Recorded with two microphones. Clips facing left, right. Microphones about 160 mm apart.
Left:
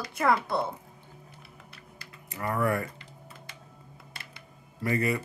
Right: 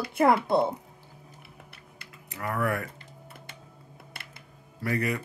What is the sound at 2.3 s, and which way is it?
Speech, centre (ahead or behind).